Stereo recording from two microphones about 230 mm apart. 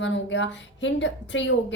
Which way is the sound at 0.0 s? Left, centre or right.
Left.